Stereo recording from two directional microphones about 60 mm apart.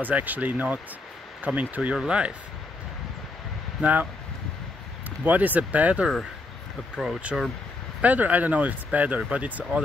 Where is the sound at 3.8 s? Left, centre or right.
Right.